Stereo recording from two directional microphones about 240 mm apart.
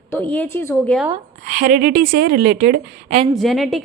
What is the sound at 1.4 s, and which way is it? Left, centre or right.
A woman's voice, right.